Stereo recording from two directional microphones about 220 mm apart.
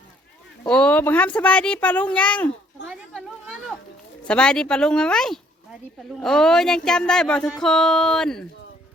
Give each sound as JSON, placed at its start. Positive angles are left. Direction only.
{"t": 0.7, "sound": "a child's voice", "side_deg": 5}
{"t": 3.1, "sound": "a sound", "side_deg": 5}
{"t": 4.3, "sound": "speech", "side_deg": 5}